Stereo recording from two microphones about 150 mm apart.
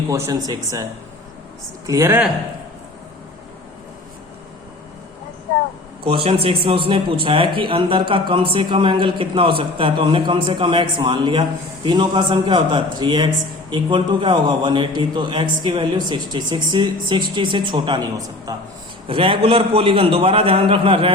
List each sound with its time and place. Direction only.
0.1 s speech: 25° right (ahead or behind)
1.9 s speech: 20° right (ahead or behind)
6.1 s a man's voice: 40° right (ahead or behind)
19.0 s a man's voice: 35° right (ahead or behind)